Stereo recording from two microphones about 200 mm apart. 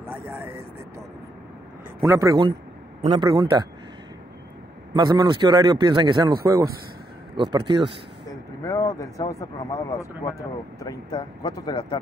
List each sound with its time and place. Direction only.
0.0 s speech: 10° right (ahead or behind)
2.0 s a man's voice: 15° right (ahead or behind)
4.9 s a man's voice: 20° right (ahead or behind)
8.6 s speech: 15° left (ahead or behind)